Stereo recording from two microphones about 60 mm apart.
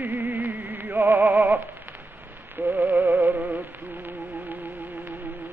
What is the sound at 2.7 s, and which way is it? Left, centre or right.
Music, right.